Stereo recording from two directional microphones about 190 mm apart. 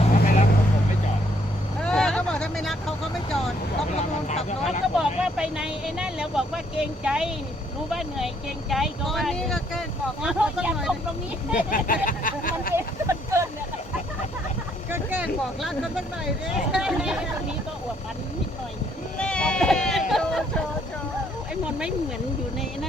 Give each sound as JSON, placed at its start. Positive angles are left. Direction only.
{"t": 0.0, "sound": "vehicle", "side_deg": 35}
{"t": 1.8, "sound": "vehicle", "side_deg": 5}
{"t": 3.9, "sound": "vehicle", "side_deg": 35}
{"t": 4.9, "sound": "vehicle", "side_deg": -5}
{"t": 7.9, "sound": "speech", "side_deg": 0}
{"t": 11.5, "sound": "speech", "side_deg": 45}
{"t": 12.0, "sound": "a sound", "side_deg": 45}
{"t": 12.7, "sound": "a sound", "side_deg": -15}
{"t": 14.8, "sound": "vehicle", "side_deg": -10}
{"t": 16.7, "sound": "a sound", "side_deg": -5}
{"t": 19.2, "sound": "sheep", "side_deg": 5}
{"t": 21.5, "sound": "a sound", "side_deg": -5}